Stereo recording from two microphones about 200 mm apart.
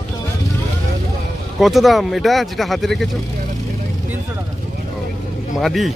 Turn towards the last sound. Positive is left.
turn(degrees=0)  # may be behind; listen again after turning